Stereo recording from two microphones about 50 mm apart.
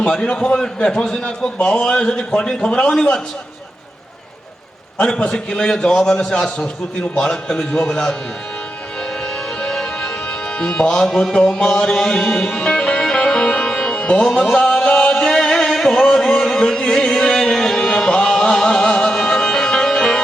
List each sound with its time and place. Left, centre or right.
0.0 s a man's voice: left
1.5 s a man's voice: left
4.9 s a man's voice: left
9.6 s music: centre
10.6 s a man's voice: centre
13.1 s music: centre